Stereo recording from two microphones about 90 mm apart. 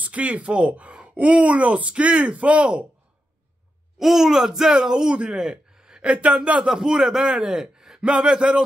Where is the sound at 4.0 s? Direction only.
5° right (ahead or behind).